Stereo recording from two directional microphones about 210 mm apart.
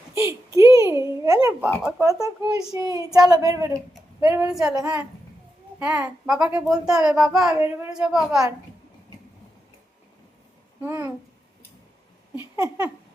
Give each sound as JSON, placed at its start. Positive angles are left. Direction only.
{"t": 0.1, "sound": "a sound", "side_deg": -15}
{"t": 1.8, "sound": "speech", "side_deg": -15}
{"t": 4.7, "sound": "speech", "side_deg": -15}
{"t": 5.8, "sound": "a child's voice", "side_deg": -5}
{"t": 10.8, "sound": "speech", "side_deg": -10}
{"t": 12.5, "sound": "speech", "side_deg": -10}